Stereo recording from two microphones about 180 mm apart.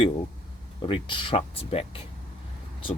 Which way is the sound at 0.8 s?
30° left (ahead or behind).